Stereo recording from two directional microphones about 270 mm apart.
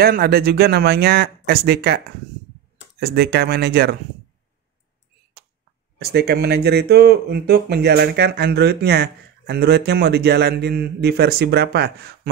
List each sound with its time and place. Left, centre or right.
0.0 s speech: right
3.0 s speech: right
5.9 s speech: right